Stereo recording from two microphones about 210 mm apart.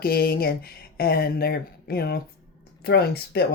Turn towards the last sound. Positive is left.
turn(degrees=50)  # may be behind; listen again after turning